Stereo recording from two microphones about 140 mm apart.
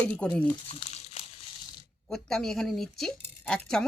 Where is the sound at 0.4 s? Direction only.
40° left (ahead or behind).